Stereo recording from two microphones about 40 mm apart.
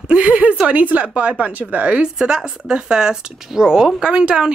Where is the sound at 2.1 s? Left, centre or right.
Centre.